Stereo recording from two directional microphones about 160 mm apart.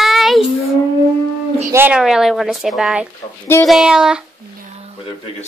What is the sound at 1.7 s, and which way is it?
Speech, 15° right (ahead or behind).